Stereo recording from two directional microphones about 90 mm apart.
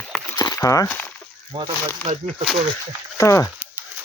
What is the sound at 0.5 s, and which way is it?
Speech, 35° left (ahead or behind).